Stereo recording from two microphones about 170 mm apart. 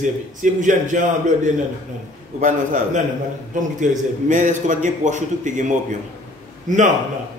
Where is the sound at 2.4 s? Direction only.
45° right (ahead or behind).